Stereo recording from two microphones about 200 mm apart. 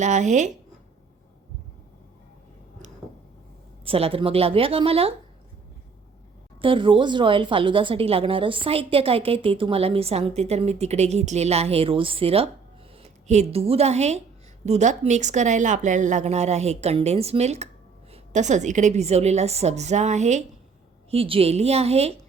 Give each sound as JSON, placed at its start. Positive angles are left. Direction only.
{"t": 0.0, "sound": "speech", "side_deg": -35}
{"t": 3.8, "sound": "speech", "side_deg": -30}
{"t": 6.6, "sound": "a woman's voice", "side_deg": -25}